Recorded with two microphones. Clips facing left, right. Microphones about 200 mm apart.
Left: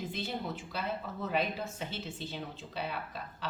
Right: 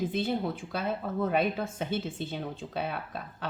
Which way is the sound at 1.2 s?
50° right (ahead or behind).